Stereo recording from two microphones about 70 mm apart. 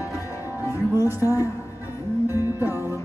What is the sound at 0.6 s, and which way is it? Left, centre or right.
Music, right.